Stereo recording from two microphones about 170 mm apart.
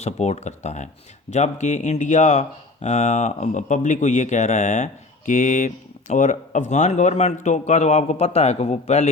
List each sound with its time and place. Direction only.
0.0 s speech: 40° left (ahead or behind)